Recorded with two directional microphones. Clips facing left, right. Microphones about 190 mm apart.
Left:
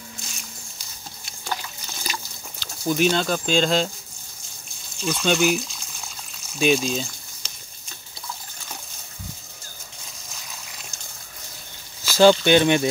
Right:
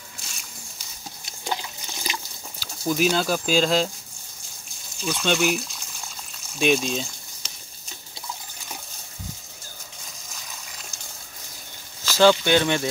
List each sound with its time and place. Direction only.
1.4 s liquid: 20° right (ahead or behind)
2.6 s speech: 5° right (ahead or behind)
5.0 s speech: centre (ahead or behind)
6.6 s a sound: centre (ahead or behind)
12.0 s speech: 15° left (ahead or behind)